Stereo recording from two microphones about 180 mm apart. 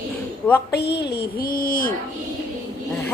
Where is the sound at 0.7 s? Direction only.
65° left (ahead or behind); by 1.9 s 50° left (ahead or behind).